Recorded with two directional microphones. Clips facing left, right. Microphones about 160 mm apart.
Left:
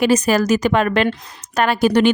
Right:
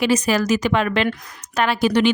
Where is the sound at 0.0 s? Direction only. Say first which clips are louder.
Left 3 dB; 45° left (ahead or behind).